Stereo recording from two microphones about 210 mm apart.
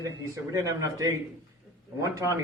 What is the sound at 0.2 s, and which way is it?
Speech, 15° right (ahead or behind).